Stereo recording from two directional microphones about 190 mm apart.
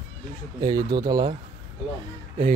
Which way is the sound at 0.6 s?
20° right (ahead or behind).